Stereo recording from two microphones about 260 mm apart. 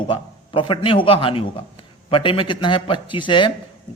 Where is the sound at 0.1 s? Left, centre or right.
Centre.